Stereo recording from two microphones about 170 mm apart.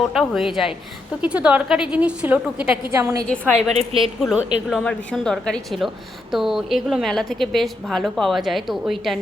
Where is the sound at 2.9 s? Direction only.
20° right (ahead or behind).